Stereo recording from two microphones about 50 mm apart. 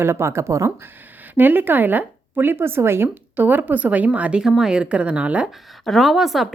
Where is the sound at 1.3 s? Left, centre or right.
Right.